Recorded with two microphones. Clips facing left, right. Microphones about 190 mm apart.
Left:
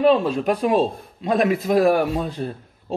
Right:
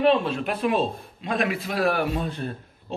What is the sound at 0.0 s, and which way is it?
A man's voice, 35° left (ahead or behind).